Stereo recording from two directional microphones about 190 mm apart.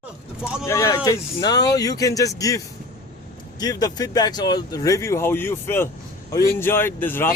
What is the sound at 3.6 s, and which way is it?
Speech, 20° left (ahead or behind).